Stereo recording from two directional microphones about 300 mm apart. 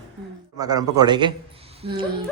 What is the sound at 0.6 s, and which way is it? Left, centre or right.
A man's voice, centre.